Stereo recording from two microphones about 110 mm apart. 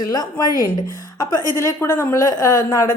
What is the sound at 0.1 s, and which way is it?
A woman's voice, 35° left (ahead or behind).